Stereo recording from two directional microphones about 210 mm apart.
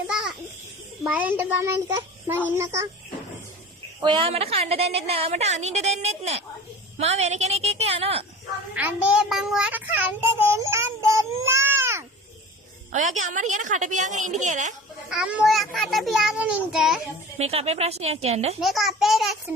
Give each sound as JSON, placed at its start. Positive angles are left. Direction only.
{"t": 0.1, "sound": "a sound", "side_deg": -5}
{"t": 1.0, "sound": "a child's voice", "side_deg": -5}
{"t": 4.0, "sound": "a woman's voice", "side_deg": -25}
{"t": 8.7, "sound": "a child's voice", "side_deg": -5}
{"t": 12.9, "sound": "a woman's voice", "side_deg": -35}
{"t": 15.1, "sound": "a child's voice", "side_deg": -5}
{"t": 17.3, "sound": "a woman's voice", "side_deg": -30}
{"t": 18.6, "sound": "a child's voice", "side_deg": 0}